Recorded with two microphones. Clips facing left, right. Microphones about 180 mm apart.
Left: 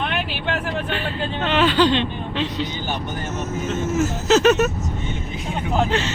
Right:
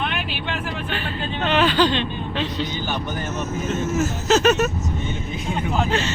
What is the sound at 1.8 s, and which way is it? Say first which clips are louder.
Speech: left 2 dB; 25° left (ahead or behind).